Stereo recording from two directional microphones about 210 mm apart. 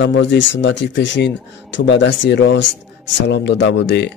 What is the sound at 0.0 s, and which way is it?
Speech, 60° left (ahead or behind).